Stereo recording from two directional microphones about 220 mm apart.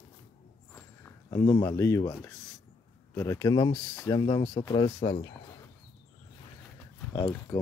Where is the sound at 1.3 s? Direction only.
15° left (ahead or behind).